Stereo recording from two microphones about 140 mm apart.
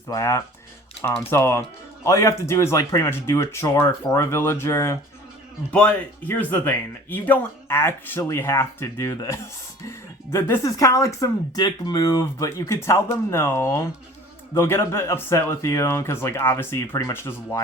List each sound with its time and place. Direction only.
0.1 s speech: 20° left (ahead or behind)